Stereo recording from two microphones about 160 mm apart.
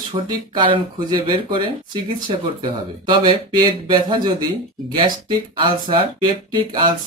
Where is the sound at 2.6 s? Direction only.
30° right (ahead or behind).